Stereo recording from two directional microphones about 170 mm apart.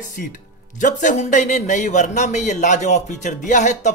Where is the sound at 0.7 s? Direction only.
50° left (ahead or behind).